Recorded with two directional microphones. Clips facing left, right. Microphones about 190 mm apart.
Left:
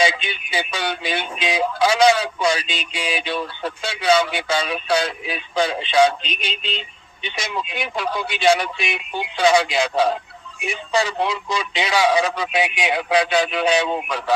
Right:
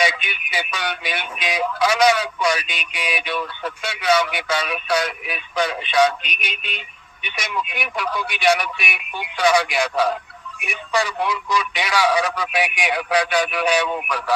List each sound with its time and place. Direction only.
0.0 s speech: 25° left (ahead or behind)